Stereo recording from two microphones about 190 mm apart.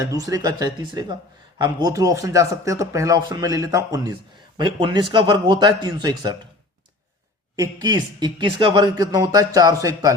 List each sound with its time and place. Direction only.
0.0 s speech: 20° right (ahead or behind)
7.5 s speech: 20° right (ahead or behind)